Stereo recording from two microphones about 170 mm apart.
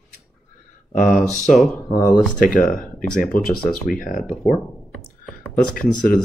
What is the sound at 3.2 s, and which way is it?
Speech, 55° left (ahead or behind).